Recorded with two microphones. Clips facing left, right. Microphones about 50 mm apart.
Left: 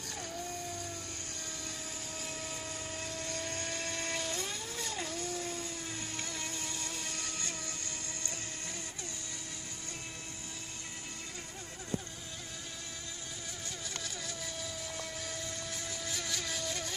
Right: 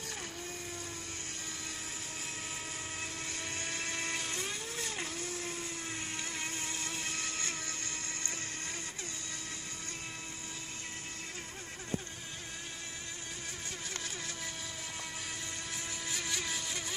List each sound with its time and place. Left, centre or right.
3.0 s vehicle: right
4.9 s a sound: right
6.2 s motorboat: right
7.0 s vehicle: right
14.0 s vehicle: right
15.7 s vehicle: right